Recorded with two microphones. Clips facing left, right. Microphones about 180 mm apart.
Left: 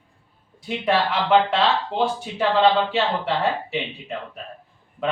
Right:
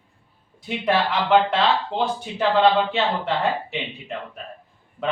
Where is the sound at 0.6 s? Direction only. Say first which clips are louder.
Even; centre (ahead or behind).